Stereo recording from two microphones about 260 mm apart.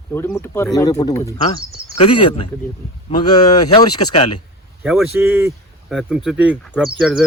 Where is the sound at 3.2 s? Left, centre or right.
Centre.